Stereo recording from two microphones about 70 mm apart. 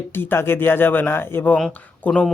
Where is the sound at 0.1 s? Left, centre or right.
Left.